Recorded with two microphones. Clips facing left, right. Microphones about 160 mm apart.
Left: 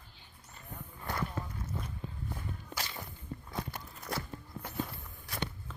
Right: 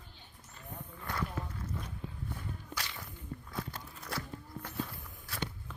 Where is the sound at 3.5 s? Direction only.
10° left (ahead or behind).